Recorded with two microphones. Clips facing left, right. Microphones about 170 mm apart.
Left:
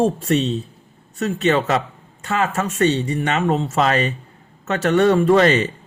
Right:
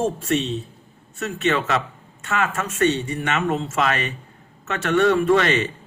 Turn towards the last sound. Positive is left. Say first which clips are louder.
# left 4 dB
turn(degrees=35)  # may be behind; listen again after turning